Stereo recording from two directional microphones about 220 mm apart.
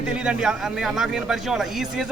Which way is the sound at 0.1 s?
5° right (ahead or behind).